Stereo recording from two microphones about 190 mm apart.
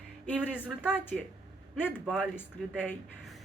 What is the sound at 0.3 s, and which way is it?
Speech, 5° right (ahead or behind).